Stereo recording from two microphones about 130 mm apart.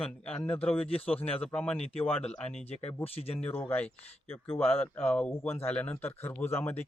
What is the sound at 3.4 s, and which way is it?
A man's voice, 10° left (ahead or behind).